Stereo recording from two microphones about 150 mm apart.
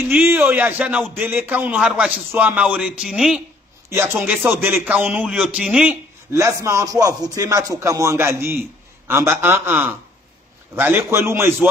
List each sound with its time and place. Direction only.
0.0 s a man's voice: 15° right (ahead or behind)
6.3 s a man's voice: 20° right (ahead or behind)